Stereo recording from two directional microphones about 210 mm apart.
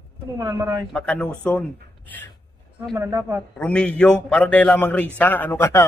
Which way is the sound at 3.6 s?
5° left (ahead or behind).